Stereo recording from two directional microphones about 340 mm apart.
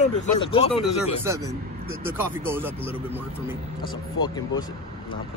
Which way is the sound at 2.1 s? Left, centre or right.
Centre.